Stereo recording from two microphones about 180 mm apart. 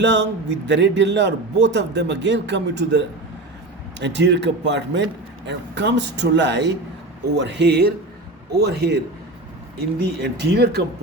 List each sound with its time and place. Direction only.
0.0 s speech: 75° right (ahead or behind)
10.0 s speech: 65° right (ahead or behind)